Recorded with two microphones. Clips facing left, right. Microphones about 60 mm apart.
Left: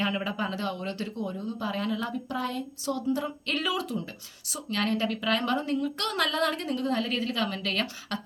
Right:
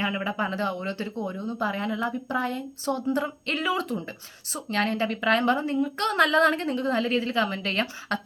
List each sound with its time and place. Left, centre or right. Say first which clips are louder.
0.0 s a woman's voice: right 2 dB; right
3.8 s a woman's voice: right 3 dB; right